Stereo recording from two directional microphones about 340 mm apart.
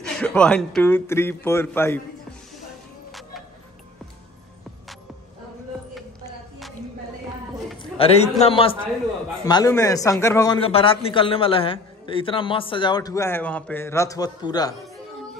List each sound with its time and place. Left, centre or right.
0.0 s a man's voice: centre
3.1 s music: centre
7.8 s a man's voice: centre